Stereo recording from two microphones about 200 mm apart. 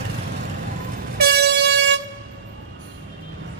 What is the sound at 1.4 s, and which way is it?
Air horn, 60° right (ahead or behind).